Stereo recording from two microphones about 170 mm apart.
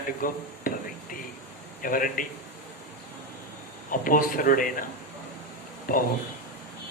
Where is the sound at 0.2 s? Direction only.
55° left (ahead or behind).